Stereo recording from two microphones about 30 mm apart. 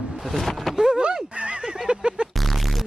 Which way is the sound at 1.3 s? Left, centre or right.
Right.